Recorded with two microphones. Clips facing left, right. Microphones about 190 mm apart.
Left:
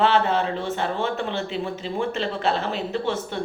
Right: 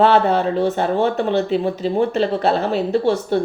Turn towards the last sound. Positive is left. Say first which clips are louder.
# right 9 dB
turn(degrees=-35)  # may be behind; listen again after turning